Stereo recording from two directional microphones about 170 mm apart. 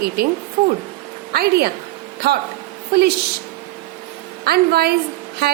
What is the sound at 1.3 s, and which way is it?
Speech, 65° right (ahead or behind).